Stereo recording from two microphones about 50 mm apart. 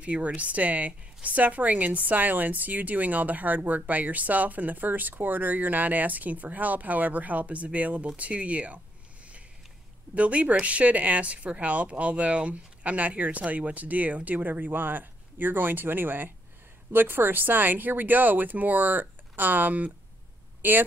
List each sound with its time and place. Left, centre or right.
0.0 s a woman's voice: right
10.1 s a woman's voice: right